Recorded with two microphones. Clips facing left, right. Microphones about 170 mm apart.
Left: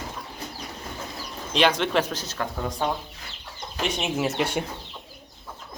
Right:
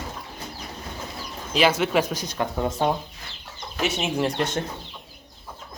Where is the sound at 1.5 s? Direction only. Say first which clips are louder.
Right 1 dB; 5° right (ahead or behind).